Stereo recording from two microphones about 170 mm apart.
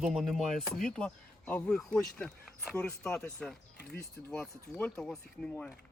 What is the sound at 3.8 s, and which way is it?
Speech, 75° left (ahead or behind).